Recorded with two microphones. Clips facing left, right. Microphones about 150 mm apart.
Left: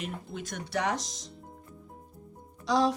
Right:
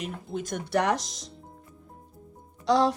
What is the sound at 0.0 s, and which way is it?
Speech, 45° right (ahead or behind).